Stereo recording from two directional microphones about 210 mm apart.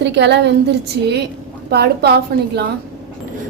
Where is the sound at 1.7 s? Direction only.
50° right (ahead or behind).